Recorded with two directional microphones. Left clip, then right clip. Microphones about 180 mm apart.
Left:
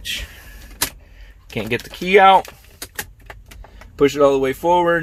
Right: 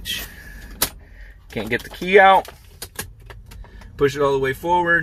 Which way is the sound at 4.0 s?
50° left (ahead or behind).